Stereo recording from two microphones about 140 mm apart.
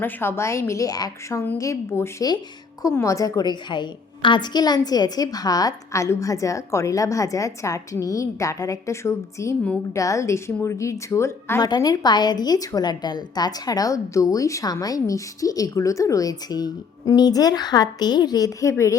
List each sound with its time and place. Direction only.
0.0 s a woman's voice: 15° left (ahead or behind)
11.6 s a woman's voice: 30° left (ahead or behind)